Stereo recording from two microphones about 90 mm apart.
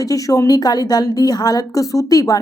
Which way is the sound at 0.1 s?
40° left (ahead or behind).